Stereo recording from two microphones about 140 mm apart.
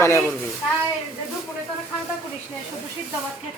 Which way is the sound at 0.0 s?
20° left (ahead or behind).